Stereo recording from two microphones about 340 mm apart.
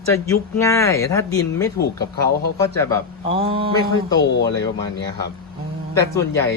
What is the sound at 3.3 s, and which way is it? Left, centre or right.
Speech, centre.